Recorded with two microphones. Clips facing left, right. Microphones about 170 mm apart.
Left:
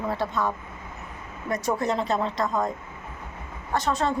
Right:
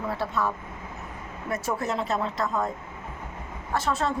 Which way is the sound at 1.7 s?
5° right (ahead or behind).